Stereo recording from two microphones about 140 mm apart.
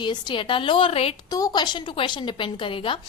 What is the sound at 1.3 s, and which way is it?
A woman's voice, 30° left (ahead or behind).